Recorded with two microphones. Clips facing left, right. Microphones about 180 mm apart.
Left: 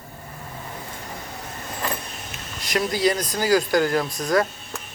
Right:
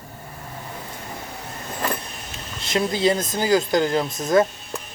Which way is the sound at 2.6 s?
25° right (ahead or behind).